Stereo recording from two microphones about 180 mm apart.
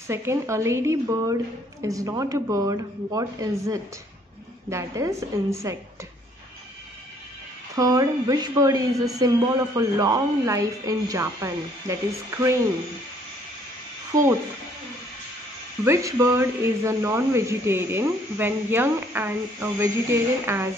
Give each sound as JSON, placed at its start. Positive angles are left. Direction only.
{"t": 0.1, "sound": "speech", "side_deg": -15}
{"t": 7.7, "sound": "speech", "side_deg": -20}
{"t": 15.8, "sound": "speech", "side_deg": -15}